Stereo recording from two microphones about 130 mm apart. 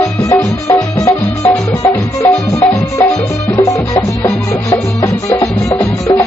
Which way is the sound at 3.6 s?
25° left (ahead or behind).